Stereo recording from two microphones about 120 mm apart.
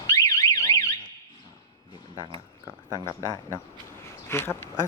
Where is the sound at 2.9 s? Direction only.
25° left (ahead or behind).